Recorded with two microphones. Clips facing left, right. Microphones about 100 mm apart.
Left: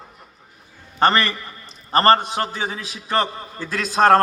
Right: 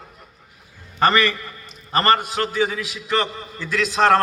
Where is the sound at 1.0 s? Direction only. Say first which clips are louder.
Even; 30° left (ahead or behind).